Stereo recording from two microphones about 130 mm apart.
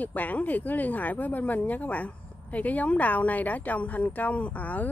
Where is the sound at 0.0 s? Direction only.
10° left (ahead or behind).